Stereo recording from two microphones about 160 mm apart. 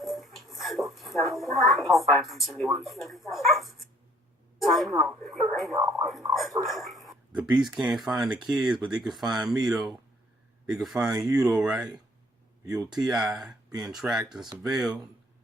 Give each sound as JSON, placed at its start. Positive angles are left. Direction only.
{"t": 0.0, "sound": "speech", "side_deg": 0}